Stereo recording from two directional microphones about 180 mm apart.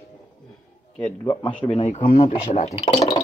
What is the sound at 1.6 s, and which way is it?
Speech, 35° left (ahead or behind).